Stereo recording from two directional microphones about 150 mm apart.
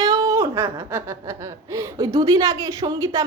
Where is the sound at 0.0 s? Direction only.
25° right (ahead or behind).